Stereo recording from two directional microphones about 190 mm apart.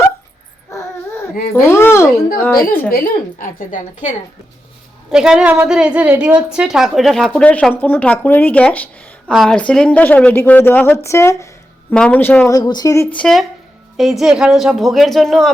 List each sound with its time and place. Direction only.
1.7 s a sound: 15° left (ahead or behind)
2.9 s a woman's voice: 50° left (ahead or behind)
5.1 s speech: 5° right (ahead or behind)
12.5 s speech: 20° left (ahead or behind)
13.1 s speech: centre (ahead or behind)